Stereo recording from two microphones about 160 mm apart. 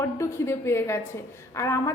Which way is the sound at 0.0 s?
15° left (ahead or behind).